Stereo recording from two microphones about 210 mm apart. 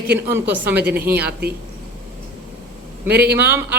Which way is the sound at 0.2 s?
10° right (ahead or behind).